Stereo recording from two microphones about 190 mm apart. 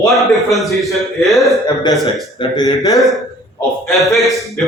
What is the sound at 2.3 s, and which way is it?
Speech, 20° left (ahead or behind).